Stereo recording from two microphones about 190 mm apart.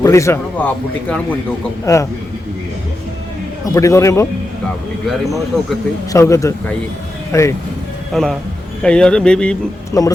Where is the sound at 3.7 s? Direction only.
15° left (ahead or behind).